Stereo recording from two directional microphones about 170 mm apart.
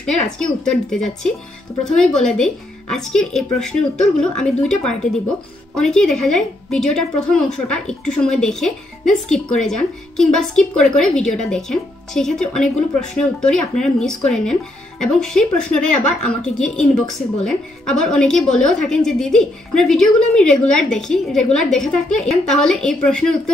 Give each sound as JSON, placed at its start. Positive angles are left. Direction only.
{"t": 0.0, "sound": "a woman's voice", "side_deg": 5}